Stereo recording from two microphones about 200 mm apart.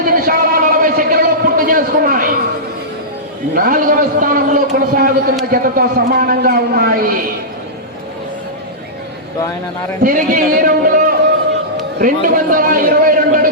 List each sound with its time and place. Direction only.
0.0 s a sound: 45° right (ahead or behind)
3.5 s a man's voice: 45° right (ahead or behind)
10.0 s a man's voice: 45° right (ahead or behind)